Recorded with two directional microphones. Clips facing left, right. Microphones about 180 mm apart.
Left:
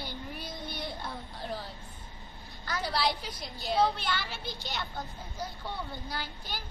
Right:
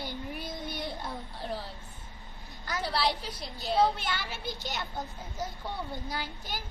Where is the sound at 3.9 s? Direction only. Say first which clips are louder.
Left 1 dB; 45° right (ahead or behind).